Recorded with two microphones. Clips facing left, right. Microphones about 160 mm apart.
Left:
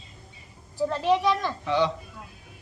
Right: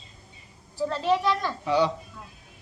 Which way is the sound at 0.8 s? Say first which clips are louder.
Left 1 dB; 15° left (ahead or behind).